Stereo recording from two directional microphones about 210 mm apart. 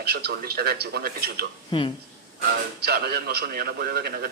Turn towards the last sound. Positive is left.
turn(degrees=-45)  # may be behind; listen again after turning